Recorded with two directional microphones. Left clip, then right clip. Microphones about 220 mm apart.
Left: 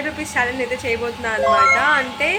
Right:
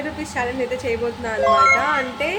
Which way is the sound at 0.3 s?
Centre (ahead or behind).